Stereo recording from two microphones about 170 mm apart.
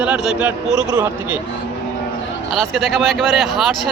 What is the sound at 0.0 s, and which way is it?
Speech, 5° right (ahead or behind).